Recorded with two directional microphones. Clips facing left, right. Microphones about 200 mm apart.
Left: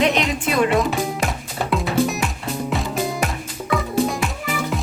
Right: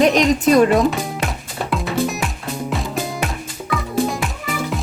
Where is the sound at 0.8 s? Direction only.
Centre (ahead or behind).